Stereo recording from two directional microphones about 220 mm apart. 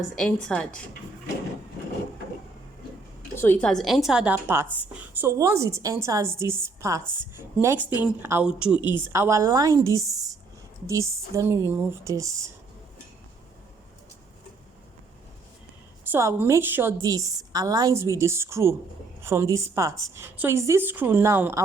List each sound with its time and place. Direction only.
0.2 s a woman's voice: 5° left (ahead or behind)
3.3 s a woman's voice: 10° left (ahead or behind); by 12.3 s 15° right (ahead or behind)
16.0 s a woman's voice: 10° right (ahead or behind)